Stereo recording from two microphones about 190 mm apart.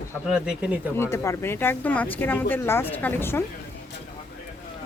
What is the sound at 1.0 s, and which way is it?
Speech, 15° left (ahead or behind).